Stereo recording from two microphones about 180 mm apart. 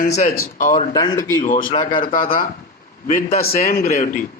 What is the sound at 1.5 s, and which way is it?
A man's voice, 50° left (ahead or behind).